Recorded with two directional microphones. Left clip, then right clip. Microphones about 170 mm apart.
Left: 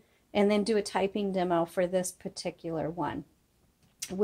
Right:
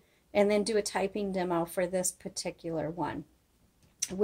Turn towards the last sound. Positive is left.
turn(degrees=35)  # may be behind; listen again after turning